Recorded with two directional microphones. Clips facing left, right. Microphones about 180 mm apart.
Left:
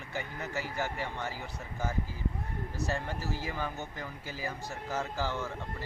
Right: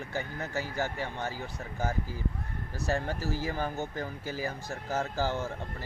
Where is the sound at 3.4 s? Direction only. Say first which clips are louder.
Right 4 dB; 35° right (ahead or behind).